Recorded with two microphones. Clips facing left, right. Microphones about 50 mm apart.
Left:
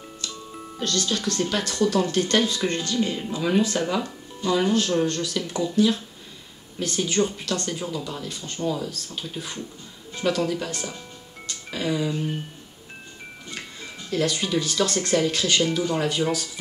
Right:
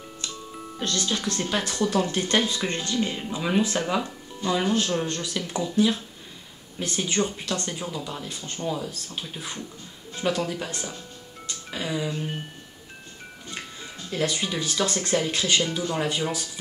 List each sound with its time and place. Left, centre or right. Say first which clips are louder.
0.8 s speech: left 2 dB; centre
7.2 s speech: left 3 dB; centre
11.7 s speech: left 3 dB; centre
14.1 s speech: left 3 dB; centre